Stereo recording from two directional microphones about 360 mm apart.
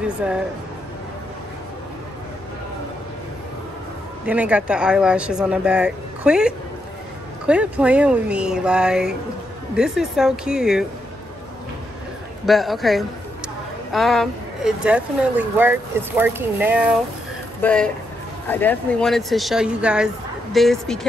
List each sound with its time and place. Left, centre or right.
0.0 s speech: centre
4.3 s speech: centre
12.4 s speech: centre